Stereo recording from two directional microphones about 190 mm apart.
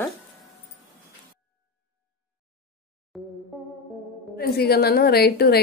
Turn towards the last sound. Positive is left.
turn(degrees=55)  # may be behind; listen again after turning